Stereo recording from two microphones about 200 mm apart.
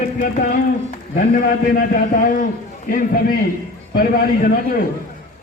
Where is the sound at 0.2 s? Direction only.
45° left (ahead or behind).